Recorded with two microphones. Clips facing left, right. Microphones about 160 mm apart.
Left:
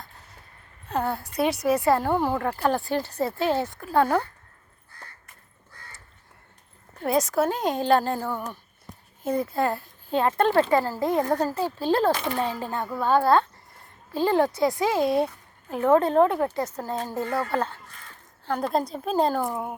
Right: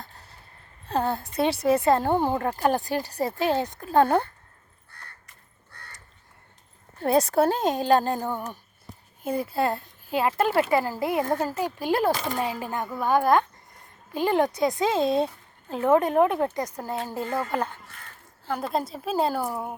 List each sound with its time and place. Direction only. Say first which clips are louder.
0.9 s speech: right 1 dB; 30° right (ahead or behind)
7.0 s speech: right 2 dB; 30° right (ahead or behind)
7.7 s speech: even; 15° right (ahead or behind)
18.4 s speech: left 2 dB; 5° right (ahead or behind)